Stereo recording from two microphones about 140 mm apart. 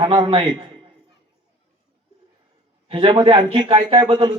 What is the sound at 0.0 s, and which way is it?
Speech, 40° right (ahead or behind).